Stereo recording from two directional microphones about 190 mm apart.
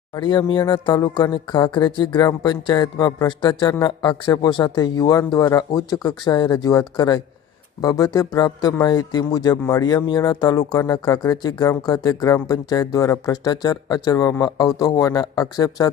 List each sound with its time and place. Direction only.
0.1 s speech: 25° left (ahead or behind)